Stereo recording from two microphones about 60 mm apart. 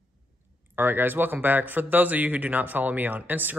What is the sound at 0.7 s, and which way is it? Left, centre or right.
Speech, right.